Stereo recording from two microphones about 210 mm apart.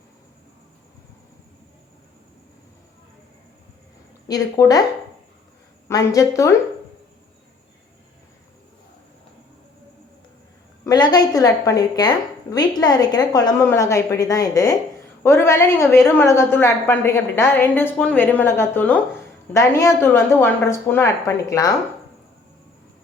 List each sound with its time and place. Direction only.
4.3 s a woman's voice: 15° left (ahead or behind)
5.9 s a woman's voice: 15° left (ahead or behind)
10.8 s a woman's voice: 20° left (ahead or behind)